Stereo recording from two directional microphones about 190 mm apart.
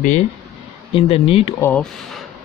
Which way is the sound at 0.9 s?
30° left (ahead or behind).